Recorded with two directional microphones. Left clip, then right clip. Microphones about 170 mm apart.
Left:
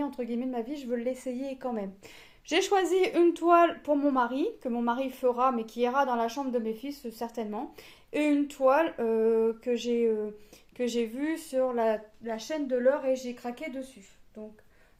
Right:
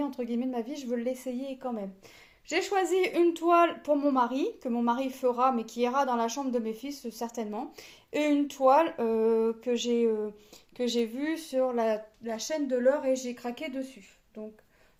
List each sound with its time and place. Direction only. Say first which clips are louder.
0.0 s a woman's voice: even; centre (ahead or behind); by 2.8 s 30° left (ahead or behind)
2.8 s speech: left 1 dB; 15° left (ahead or behind); by 13.9 s 20° right (ahead or behind)